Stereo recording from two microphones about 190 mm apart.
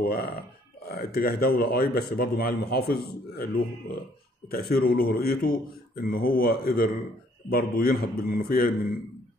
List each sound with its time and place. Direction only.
0.0 s a man's voice: 55° left (ahead or behind)